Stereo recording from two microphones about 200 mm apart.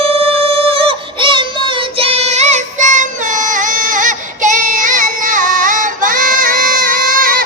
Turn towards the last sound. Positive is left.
turn(degrees=-45)  # may be behind; listen again after turning